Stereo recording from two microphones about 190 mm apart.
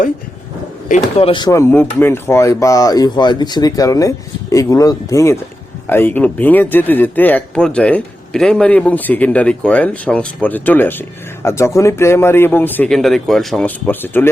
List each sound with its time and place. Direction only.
0.9 s speech: 35° left (ahead or behind); by 14.3 s 10° left (ahead or behind)